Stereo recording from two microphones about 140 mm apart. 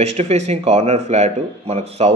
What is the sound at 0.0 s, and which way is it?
Speech, 50° right (ahead or behind).